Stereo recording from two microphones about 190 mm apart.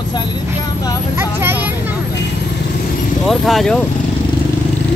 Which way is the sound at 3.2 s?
Centre (ahead or behind).